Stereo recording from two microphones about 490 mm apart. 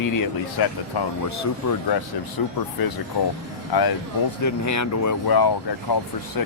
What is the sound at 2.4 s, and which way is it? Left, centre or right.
Speech, left.